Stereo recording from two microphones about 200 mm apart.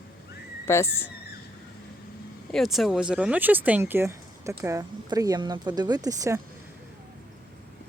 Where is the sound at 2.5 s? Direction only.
Centre (ahead or behind); by 6.4 s 15° right (ahead or behind).